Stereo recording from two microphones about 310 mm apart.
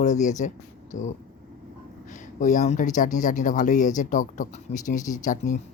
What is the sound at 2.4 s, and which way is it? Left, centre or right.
Speech, left.